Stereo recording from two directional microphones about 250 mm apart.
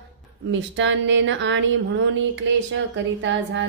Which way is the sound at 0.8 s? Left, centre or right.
Right.